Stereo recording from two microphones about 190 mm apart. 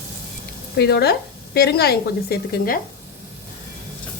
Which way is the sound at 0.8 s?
60° left (ahead or behind).